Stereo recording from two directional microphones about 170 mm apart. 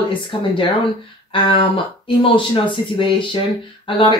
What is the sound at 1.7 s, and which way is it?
Speech, 30° left (ahead or behind).